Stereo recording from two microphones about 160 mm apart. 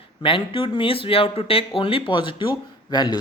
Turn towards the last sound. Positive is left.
turn(degrees=30)  # may be behind; listen again after turning